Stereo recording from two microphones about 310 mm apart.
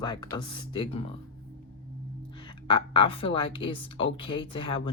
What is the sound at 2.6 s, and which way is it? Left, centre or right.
A woman's voice, centre.